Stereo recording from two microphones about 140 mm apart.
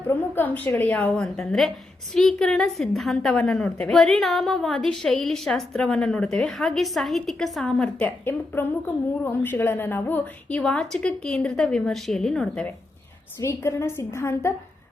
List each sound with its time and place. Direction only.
0.1 s a woman's voice: 15° left (ahead or behind)
13.4 s a woman's voice: 20° left (ahead or behind)